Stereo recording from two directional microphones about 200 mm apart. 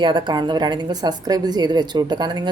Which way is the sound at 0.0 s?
25° right (ahead or behind).